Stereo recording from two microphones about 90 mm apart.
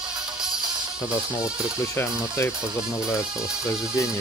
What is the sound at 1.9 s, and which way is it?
Speech, 25° left (ahead or behind).